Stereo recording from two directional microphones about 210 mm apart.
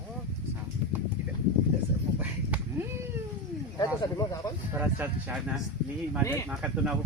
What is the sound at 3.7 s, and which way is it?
Speech, 15° left (ahead or behind).